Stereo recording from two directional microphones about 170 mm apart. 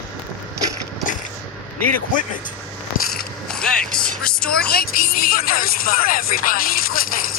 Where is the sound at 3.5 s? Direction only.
5° left (ahead or behind).